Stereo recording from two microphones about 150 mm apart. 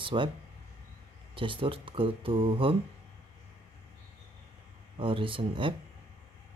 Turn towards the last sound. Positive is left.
turn(degrees=-35)  # may be behind; listen again after turning